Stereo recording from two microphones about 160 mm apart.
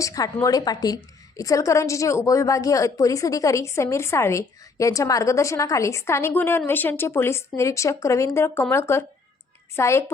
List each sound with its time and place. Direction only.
0.0 s a woman's voice: 20° left (ahead or behind)